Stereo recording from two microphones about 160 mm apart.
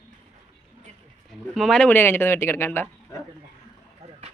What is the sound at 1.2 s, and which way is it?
Speech, centre (ahead or behind).